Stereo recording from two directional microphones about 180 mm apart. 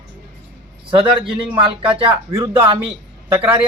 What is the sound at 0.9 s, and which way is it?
Speech, 30° right (ahead or behind).